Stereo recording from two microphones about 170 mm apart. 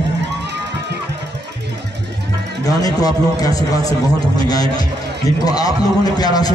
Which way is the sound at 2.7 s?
20° left (ahead or behind).